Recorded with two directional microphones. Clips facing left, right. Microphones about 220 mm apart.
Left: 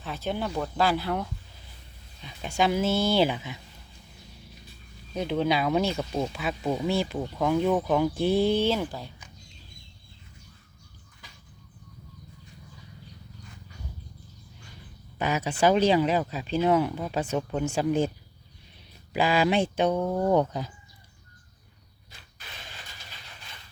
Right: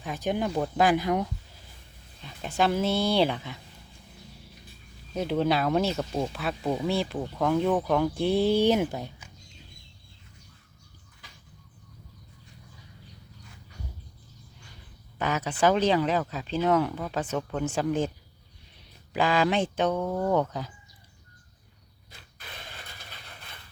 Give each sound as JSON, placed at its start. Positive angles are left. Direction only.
{"t": 0.0, "sound": "speech", "side_deg": -15}
{"t": 2.2, "sound": "speech", "side_deg": 0}
{"t": 5.1, "sound": "speech", "side_deg": -5}
{"t": 8.5, "sound": "speech", "side_deg": -15}
{"t": 15.2, "sound": "speech", "side_deg": 10}
{"t": 19.1, "sound": "speech", "side_deg": 10}
{"t": 22.4, "sound": "vehicle", "side_deg": -55}